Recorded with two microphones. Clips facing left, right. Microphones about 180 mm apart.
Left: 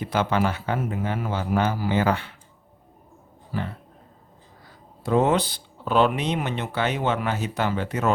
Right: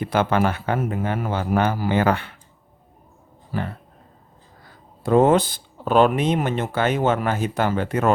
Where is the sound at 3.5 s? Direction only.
55° right (ahead or behind).